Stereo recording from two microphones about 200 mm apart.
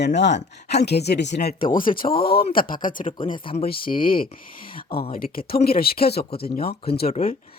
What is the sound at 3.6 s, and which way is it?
Speech, 45° left (ahead or behind).